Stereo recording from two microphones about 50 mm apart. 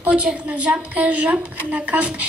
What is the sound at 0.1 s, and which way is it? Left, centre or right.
A woman's voice, right.